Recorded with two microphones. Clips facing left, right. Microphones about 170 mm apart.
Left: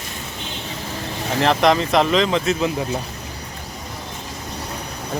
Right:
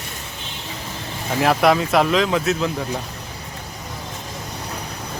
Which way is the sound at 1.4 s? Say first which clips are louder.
Even; 5° right (ahead or behind).